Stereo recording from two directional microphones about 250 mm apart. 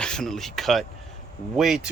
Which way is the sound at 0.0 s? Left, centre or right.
Centre.